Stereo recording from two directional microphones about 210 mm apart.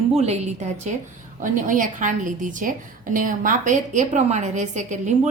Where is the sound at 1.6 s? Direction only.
40° right (ahead or behind).